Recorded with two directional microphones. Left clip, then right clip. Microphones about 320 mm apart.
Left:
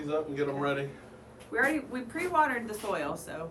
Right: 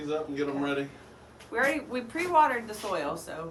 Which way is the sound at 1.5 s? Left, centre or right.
Centre.